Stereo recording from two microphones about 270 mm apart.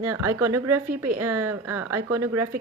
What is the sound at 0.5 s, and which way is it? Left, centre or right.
Speech, right.